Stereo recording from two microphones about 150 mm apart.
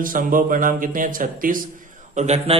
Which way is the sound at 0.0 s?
65° right (ahead or behind).